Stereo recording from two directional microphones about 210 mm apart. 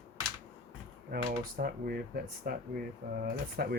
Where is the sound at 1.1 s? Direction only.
45° right (ahead or behind).